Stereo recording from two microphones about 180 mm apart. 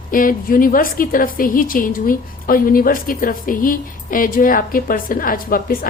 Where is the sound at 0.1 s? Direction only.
50° left (ahead or behind).